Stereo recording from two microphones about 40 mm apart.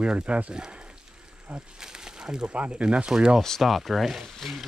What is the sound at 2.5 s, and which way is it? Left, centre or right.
Speech, right.